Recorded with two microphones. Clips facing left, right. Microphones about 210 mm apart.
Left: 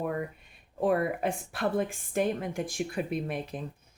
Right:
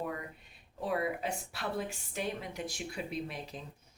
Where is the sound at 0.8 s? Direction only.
55° left (ahead or behind).